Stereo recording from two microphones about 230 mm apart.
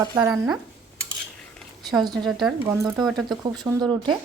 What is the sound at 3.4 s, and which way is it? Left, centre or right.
Speech, centre.